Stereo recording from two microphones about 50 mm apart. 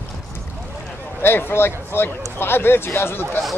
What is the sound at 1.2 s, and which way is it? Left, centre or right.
Speech, left.